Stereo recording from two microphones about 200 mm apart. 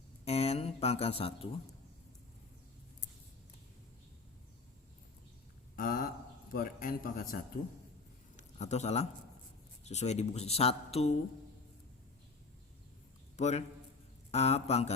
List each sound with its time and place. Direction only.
0.3 s speech: 30° left (ahead or behind)
5.7 s a man's voice: 45° left (ahead or behind)
8.4 s speech: 35° left (ahead or behind)
13.3 s a man's voice: 35° left (ahead or behind)